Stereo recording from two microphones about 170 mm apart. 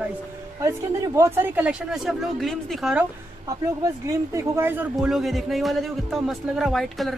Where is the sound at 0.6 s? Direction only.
20° right (ahead or behind).